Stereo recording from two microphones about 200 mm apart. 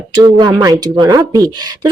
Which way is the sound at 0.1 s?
20° right (ahead or behind).